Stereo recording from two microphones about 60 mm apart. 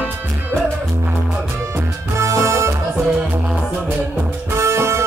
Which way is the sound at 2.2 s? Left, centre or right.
Right.